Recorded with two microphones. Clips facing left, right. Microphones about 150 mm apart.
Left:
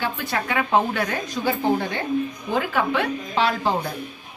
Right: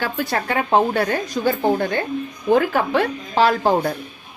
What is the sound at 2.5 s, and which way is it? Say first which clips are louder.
Speech: right 7 dB; 40° right (ahead or behind).